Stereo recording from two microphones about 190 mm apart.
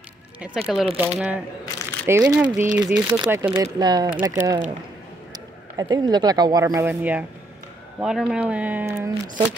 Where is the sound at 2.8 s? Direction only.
20° right (ahead or behind).